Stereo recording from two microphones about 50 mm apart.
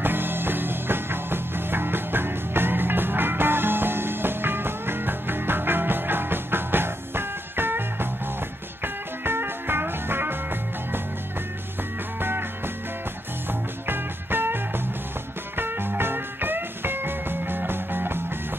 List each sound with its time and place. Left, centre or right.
0.0 s music: right
12.2 s music: right